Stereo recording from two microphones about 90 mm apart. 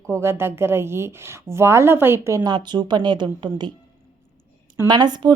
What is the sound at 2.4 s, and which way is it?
A woman's voice, 55° right (ahead or behind).